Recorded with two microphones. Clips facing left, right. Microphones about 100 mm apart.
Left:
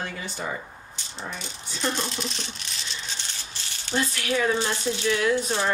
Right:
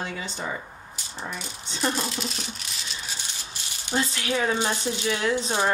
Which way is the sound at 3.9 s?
20° right (ahead or behind).